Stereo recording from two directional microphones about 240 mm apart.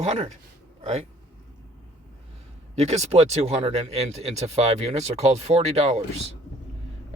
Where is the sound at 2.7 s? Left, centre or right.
Right.